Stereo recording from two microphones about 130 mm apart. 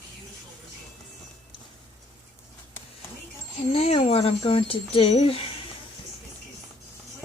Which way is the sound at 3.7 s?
50° left (ahead or behind).